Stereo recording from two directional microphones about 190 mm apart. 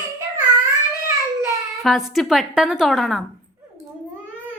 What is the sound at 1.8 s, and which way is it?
A woman's voice, centre (ahead or behind).